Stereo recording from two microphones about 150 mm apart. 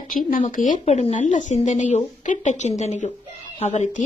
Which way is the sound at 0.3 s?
60° left (ahead or behind).